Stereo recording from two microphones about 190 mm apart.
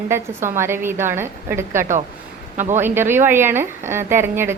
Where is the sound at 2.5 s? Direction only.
40° right (ahead or behind).